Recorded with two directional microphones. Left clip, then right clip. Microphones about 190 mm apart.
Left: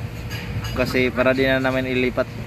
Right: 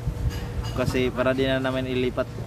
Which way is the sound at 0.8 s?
25° left (ahead or behind).